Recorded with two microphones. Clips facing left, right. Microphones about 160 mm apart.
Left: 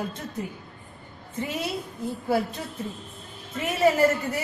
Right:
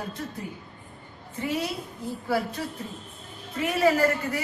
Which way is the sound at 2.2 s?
20° left (ahead or behind).